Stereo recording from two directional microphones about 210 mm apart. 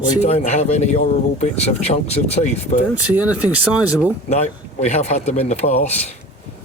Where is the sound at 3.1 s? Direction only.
5° right (ahead or behind).